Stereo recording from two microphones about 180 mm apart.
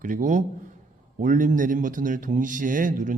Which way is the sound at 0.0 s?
45° right (ahead or behind).